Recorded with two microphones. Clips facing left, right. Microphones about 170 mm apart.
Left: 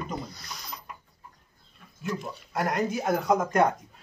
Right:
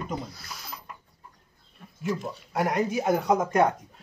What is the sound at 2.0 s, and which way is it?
Speech, 5° right (ahead or behind).